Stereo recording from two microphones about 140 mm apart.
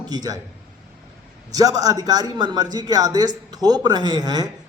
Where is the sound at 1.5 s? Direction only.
25° right (ahead or behind).